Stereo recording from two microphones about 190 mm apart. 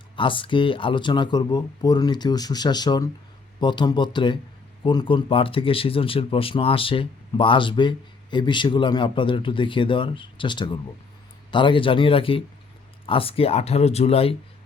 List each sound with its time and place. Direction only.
0.2 s speech: 25° left (ahead or behind)